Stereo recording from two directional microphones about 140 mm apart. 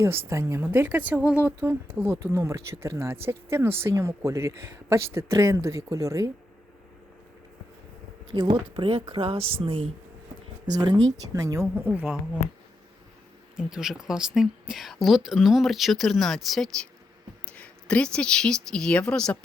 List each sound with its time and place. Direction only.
0.0 s speech: 15° right (ahead or behind)
8.3 s speech: 35° right (ahead or behind)
10.7 s speech: 30° right (ahead or behind); by 12.0 s 15° right (ahead or behind)
13.6 s a woman's voice: 5° right (ahead or behind)